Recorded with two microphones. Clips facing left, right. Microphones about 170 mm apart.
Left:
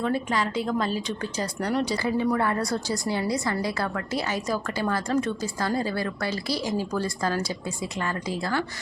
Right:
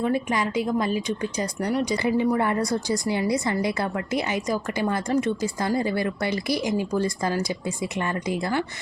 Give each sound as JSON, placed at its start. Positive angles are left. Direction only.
{"t": 0.0, "sound": "a woman's voice", "side_deg": -15}